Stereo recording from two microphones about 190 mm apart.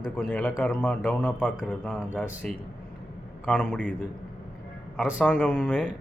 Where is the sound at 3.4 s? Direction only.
5° left (ahead or behind).